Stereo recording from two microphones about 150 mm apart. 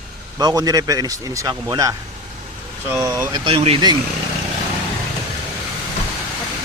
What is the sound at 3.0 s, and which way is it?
Speech, 20° right (ahead or behind).